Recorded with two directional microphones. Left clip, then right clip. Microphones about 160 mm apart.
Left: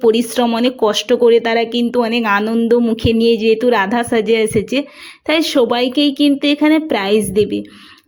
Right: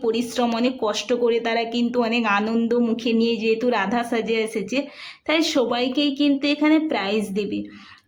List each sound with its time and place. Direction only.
0.0 s speech: 40° left (ahead or behind)